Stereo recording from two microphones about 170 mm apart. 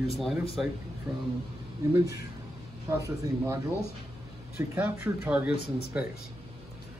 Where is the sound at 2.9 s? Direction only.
15° right (ahead or behind).